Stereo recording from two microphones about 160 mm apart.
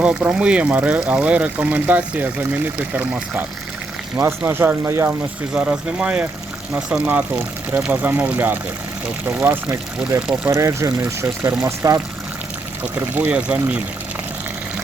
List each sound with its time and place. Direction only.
0.0 s speech: 5° right (ahead or behind)